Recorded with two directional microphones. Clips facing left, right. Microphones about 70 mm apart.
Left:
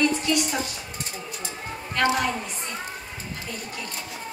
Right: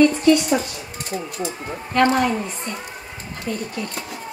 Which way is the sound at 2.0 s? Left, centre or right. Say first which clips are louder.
Right 6 dB; right.